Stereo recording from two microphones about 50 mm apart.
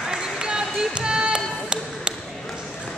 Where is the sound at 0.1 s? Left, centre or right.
Centre.